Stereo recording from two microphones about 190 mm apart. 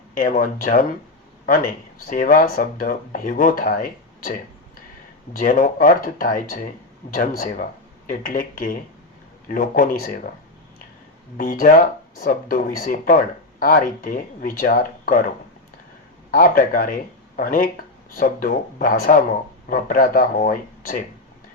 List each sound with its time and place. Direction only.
0.1 s speech: 45° left (ahead or behind)
2.0 s speech: 45° left (ahead or behind)
5.4 s speech: 45° left (ahead or behind)
11.3 s speech: 45° left (ahead or behind)
16.3 s speech: 45° left (ahead or behind)